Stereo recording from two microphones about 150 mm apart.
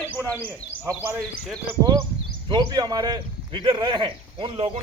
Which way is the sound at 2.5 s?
30° right (ahead or behind).